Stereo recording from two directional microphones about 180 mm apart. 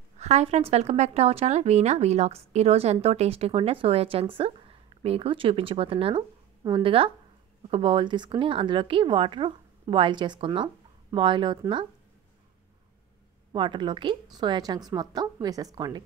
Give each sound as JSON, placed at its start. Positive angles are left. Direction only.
{"t": 0.2, "sound": "speech", "side_deg": -35}
{"t": 13.5, "sound": "speech", "side_deg": -25}